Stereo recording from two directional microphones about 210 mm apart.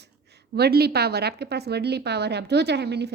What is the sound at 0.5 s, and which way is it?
A woman's voice, 50° right (ahead or behind).